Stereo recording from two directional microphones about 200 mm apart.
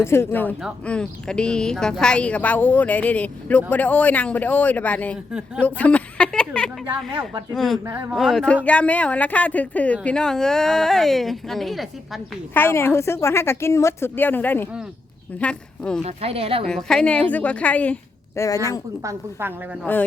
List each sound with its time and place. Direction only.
0.0 s a woman's voice: 10° left (ahead or behind)
12.5 s a woman's voice: 10° left (ahead or behind)
16.0 s speech: 30° right (ahead or behind)
16.6 s a woman's voice: 5° left (ahead or behind)
19.0 s a woman's voice: 10° right (ahead or behind)
19.8 s a woman's voice: 10° left (ahead or behind)